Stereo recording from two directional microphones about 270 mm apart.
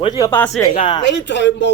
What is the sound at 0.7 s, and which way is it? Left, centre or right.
Speech, centre.